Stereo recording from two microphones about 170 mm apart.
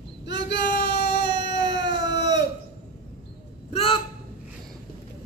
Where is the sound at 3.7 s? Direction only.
35° left (ahead or behind).